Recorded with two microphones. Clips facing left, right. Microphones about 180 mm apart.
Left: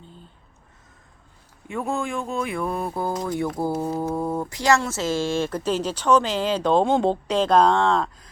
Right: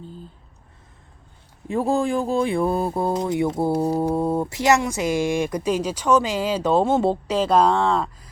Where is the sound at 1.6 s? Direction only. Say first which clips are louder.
Right 6 dB; 35° right (ahead or behind).